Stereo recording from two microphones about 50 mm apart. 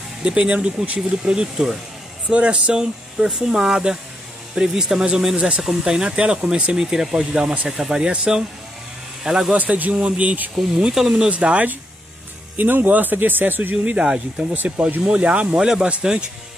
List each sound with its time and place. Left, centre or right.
0.2 s speech: centre
2.2 s speech: right
7.3 s speech: right
7.6 s speech: centre
9.5 s speech: right
11.0 s speech: centre
11.2 s speech: right
12.5 s speech: right
14.0 s speech: centre
15.0 s speech: right
15.6 s speech: centre